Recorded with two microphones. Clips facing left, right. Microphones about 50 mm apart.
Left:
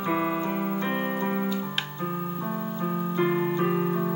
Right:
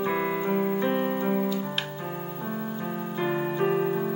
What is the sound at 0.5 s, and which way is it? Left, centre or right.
Piano, centre.